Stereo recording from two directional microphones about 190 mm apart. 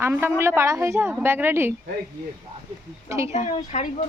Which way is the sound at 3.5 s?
35° left (ahead or behind).